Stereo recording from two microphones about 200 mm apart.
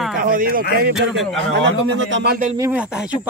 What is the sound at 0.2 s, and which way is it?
Speech, 45° right (ahead or behind).